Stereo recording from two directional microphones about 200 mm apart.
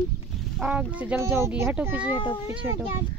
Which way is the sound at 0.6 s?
5° right (ahead or behind).